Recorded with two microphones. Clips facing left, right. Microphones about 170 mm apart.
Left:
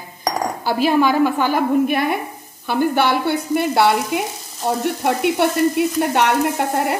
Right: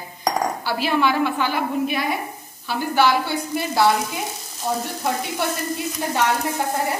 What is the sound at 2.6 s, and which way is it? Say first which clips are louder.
Frying: left 2 dB; 55° left (ahead or behind).